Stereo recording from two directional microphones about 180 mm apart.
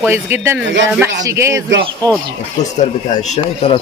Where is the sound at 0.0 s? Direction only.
10° right (ahead or behind).